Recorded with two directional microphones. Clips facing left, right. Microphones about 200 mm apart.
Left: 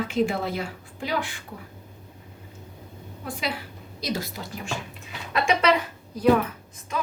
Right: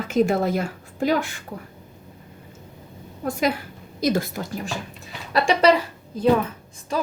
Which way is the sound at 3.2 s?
45° right (ahead or behind).